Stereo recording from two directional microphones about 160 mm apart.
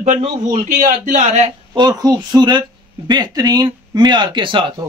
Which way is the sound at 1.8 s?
25° right (ahead or behind).